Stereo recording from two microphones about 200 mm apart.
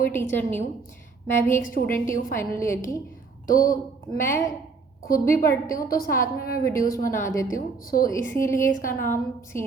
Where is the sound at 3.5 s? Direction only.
45° left (ahead or behind).